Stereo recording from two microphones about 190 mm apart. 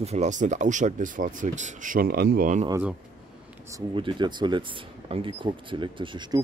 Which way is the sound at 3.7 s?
20° right (ahead or behind).